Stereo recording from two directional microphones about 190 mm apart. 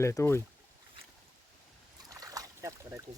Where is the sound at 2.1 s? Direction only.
20° right (ahead or behind).